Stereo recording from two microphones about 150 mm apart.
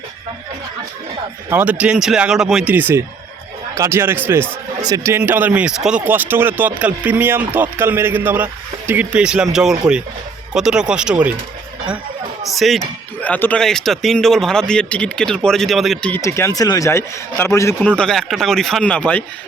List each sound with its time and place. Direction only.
1.5 s speech: 10° right (ahead or behind)
12.5 s speech: centre (ahead or behind)
16.2 s speech: 20° left (ahead or behind)